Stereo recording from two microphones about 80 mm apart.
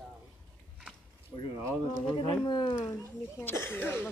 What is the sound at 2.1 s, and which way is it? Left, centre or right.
Speech, left.